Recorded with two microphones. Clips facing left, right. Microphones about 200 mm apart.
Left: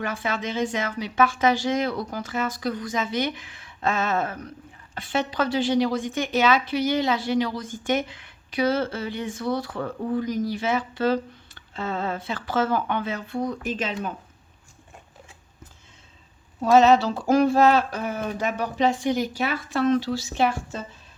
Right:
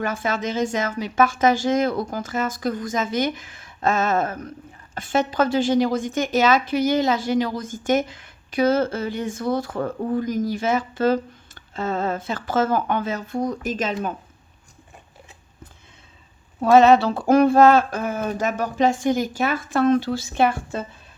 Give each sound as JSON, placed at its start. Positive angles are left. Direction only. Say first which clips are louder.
{"t": 0.0, "sound": "a woman's voice", "louder": "right 3 dB", "side_deg": -45}
{"t": 16.6, "sound": "a woman's voice", "louder": "right 3 dB", "side_deg": -60}